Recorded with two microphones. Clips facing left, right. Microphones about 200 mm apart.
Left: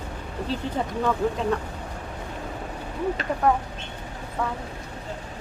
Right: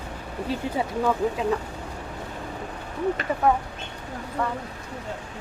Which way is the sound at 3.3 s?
5° right (ahead or behind).